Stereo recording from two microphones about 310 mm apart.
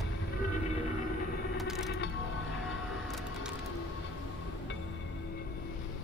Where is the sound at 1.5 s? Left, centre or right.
Centre.